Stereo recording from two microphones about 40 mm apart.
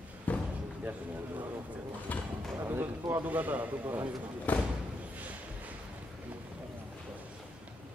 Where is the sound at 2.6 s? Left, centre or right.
Right.